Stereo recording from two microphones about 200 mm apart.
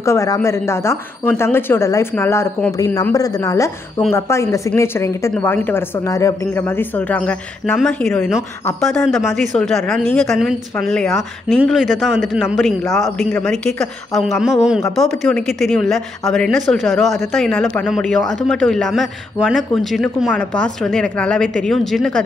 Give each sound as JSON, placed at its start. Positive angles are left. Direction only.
{"t": 0.0, "sound": "a man's voice", "side_deg": 15}